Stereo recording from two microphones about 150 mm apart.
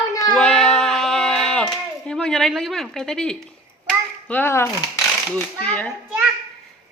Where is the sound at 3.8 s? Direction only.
10° left (ahead or behind).